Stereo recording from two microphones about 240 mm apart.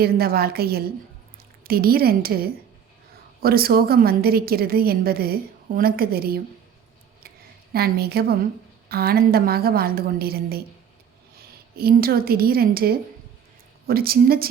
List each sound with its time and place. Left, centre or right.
0.0 s a woman's voice: right
7.7 s a woman's voice: right